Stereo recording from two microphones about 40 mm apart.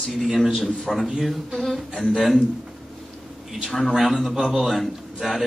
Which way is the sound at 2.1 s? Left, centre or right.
Centre.